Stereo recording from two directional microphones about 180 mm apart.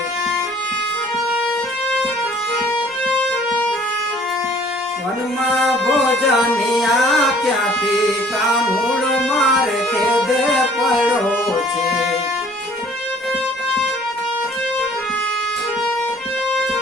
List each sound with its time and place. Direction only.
5.6 s music: centre (ahead or behind)